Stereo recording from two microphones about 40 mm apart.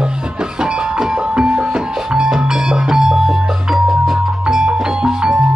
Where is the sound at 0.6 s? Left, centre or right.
Right.